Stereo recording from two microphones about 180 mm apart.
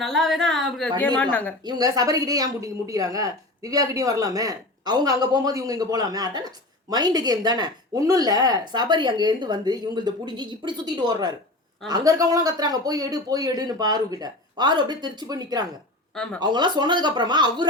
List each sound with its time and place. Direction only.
0.0 s a woman's voice: centre (ahead or behind)
1.6 s speech: 20° right (ahead or behind)
16.1 s speech: 5° left (ahead or behind)
16.4 s speech: 25° right (ahead or behind)